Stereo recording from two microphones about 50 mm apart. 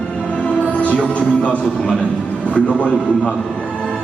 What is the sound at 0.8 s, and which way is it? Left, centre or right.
A man's voice, left.